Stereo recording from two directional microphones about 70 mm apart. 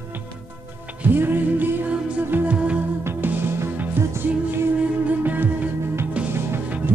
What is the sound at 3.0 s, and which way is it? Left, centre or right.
Music, right.